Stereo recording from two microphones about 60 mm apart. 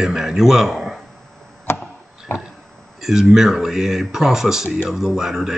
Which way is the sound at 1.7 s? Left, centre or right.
Left.